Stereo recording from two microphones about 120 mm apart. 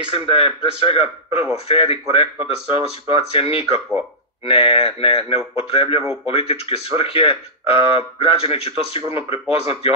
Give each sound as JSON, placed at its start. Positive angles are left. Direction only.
{"t": 0.0, "sound": "speech", "side_deg": 50}